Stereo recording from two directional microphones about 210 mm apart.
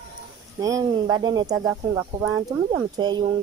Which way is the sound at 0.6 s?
15° right (ahead or behind).